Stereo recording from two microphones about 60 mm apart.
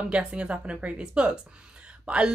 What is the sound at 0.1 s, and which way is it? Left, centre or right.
A woman's voice, centre.